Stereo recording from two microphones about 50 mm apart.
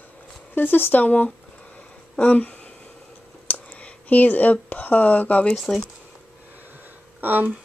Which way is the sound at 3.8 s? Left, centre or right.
Left.